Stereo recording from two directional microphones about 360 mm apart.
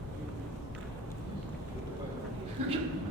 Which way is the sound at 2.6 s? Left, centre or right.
Centre.